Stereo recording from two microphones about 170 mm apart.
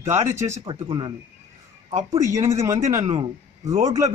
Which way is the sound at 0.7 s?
25° right (ahead or behind).